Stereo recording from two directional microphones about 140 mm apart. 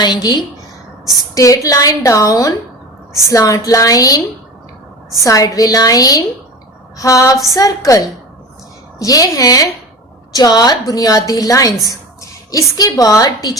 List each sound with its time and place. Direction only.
0.0 s a woman's voice: 30° left (ahead or behind)
5.2 s a woman's voice: 25° left (ahead or behind)